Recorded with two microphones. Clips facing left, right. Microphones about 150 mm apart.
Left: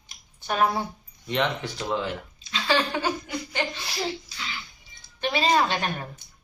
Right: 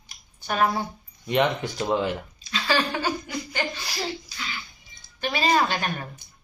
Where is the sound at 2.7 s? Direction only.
20° left (ahead or behind).